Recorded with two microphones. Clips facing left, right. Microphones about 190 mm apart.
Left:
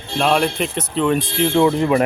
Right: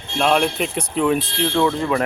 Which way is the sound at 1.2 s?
10° left (ahead or behind).